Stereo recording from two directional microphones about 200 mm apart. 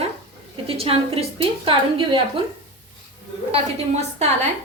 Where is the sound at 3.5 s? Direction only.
35° right (ahead or behind).